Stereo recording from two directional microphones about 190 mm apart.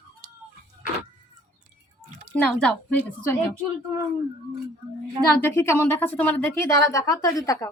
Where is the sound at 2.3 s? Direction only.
5° left (ahead or behind).